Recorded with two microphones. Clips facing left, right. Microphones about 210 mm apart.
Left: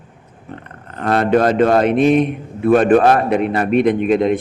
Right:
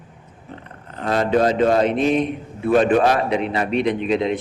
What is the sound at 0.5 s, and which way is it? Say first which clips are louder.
A man's voice: left 4 dB; 55° left (ahead or behind).